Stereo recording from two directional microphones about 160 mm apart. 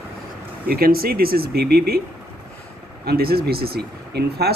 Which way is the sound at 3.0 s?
75° right (ahead or behind).